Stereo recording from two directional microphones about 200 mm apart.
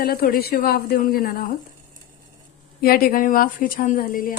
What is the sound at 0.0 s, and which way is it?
A woman's voice, 50° left (ahead or behind).